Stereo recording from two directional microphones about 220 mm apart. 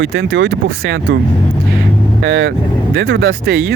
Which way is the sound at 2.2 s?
50° right (ahead or behind).